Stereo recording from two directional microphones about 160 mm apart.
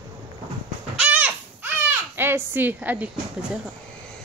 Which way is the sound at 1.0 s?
10° right (ahead or behind).